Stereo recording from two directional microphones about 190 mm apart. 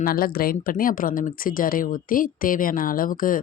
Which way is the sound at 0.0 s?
50° left (ahead or behind).